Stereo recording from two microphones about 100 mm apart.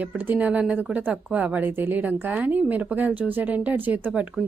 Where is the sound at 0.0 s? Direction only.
15° right (ahead or behind).